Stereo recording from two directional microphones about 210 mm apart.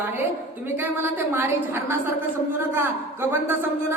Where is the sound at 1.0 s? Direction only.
10° right (ahead or behind).